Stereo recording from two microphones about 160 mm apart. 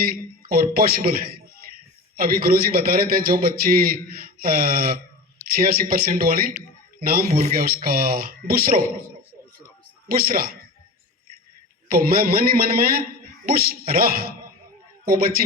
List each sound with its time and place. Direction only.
0.0 s a man's voice: 70° right (ahead or behind)
10.1 s a man's voice: 70° right (ahead or behind)
11.9 s a man's voice: 70° right (ahead or behind)